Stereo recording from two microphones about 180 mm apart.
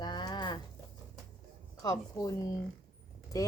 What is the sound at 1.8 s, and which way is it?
Speech, 20° left (ahead or behind).